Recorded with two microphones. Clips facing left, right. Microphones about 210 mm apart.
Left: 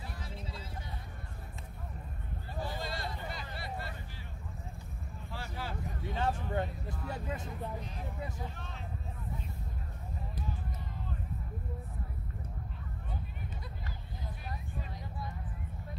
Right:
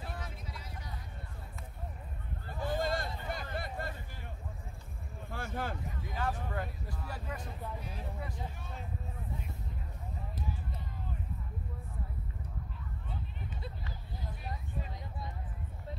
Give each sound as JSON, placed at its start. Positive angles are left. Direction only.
{"t": 0.2, "sound": "vehicle", "side_deg": 30}
{"t": 2.7, "sound": "a sound", "side_deg": -50}
{"t": 5.3, "sound": "vehicle", "side_deg": -50}
{"t": 6.1, "sound": "speech", "side_deg": 25}
{"t": 15.0, "sound": "vehicle", "side_deg": -20}